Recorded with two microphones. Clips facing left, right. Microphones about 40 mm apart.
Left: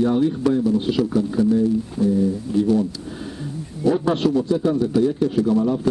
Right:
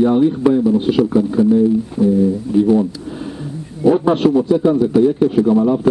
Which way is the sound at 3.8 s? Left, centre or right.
Centre.